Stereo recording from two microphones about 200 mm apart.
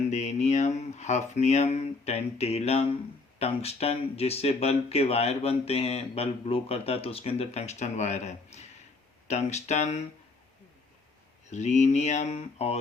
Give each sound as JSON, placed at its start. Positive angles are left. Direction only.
{"t": 0.1, "sound": "speech", "side_deg": 35}
{"t": 11.5, "sound": "speech", "side_deg": 35}